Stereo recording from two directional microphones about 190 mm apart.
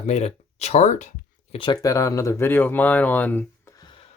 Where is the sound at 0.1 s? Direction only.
35° left (ahead or behind).